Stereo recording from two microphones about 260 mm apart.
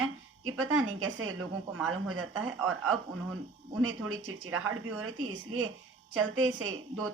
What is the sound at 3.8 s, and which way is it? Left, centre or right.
A woman's voice, right.